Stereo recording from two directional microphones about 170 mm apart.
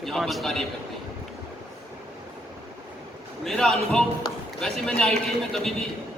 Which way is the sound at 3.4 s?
Centre (ahead or behind).